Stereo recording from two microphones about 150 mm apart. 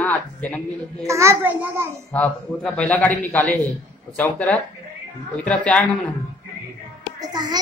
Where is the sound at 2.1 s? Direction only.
5° left (ahead or behind).